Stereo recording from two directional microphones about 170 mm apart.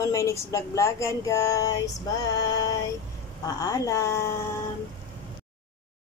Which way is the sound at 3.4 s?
20° left (ahead or behind).